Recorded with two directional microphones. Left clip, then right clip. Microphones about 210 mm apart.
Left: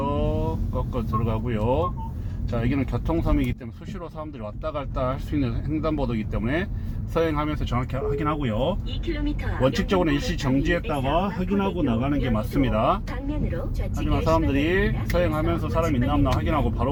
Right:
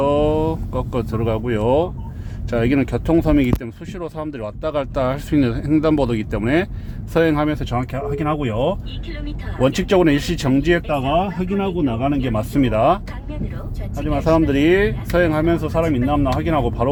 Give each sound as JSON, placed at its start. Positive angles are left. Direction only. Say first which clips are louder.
{"t": 0.0, "sound": "a sound", "louder": "right 10 dB", "side_deg": -50}
{"t": 2.5, "sound": "speech", "louder": "right 9 dB", "side_deg": -45}
{"t": 14.1, "sound": "speech", "louder": "right 6 dB", "side_deg": -45}